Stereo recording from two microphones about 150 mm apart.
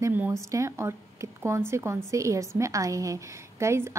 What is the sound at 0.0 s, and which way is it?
A woman's voice, 10° right (ahead or behind).